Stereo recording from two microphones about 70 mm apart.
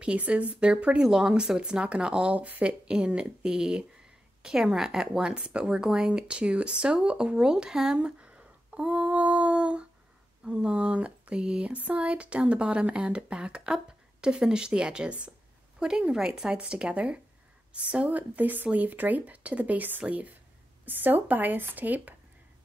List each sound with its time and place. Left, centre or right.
0.0 s speech: centre
1.0 s speech: centre; by 22.1 s right